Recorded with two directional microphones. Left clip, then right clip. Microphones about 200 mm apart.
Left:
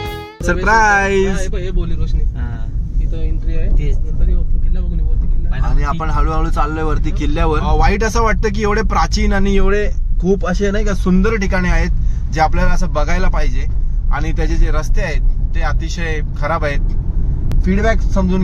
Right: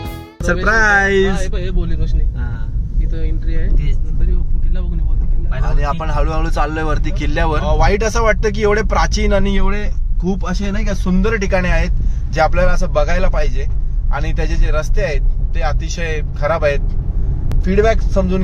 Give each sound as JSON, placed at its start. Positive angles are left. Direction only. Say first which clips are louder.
{"t": 0.0, "sound": "speech", "louder": "left 2 dB", "side_deg": 0}
{"t": 5.6, "sound": "speech", "louder": "even", "side_deg": 0}
{"t": 10.3, "sound": "speech", "louder": "left 7 dB", "side_deg": 20}
{"t": 11.2, "sound": "speech", "louder": "right 3 dB", "side_deg": 0}
{"t": 17.6, "sound": "speech", "louder": "right 3 dB", "side_deg": -10}